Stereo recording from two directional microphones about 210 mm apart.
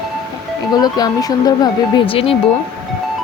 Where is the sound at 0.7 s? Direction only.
20° left (ahead or behind).